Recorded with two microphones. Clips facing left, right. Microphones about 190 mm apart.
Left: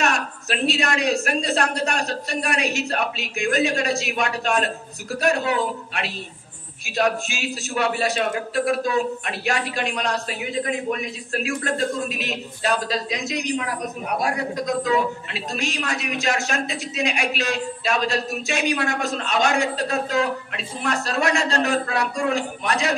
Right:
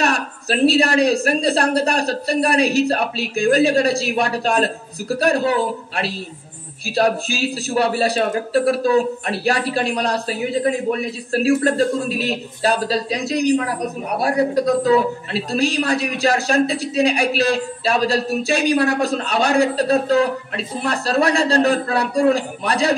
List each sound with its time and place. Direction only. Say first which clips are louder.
0.0 s a man's voice: right 3 dB; 35° right (ahead or behind)